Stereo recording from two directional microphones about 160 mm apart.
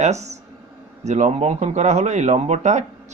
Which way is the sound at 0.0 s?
45° right (ahead or behind).